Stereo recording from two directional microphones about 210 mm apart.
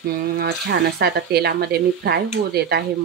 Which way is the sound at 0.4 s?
50° right (ahead or behind).